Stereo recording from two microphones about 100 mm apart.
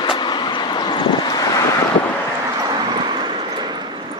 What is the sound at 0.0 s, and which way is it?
Vehicle, 50° left (ahead or behind).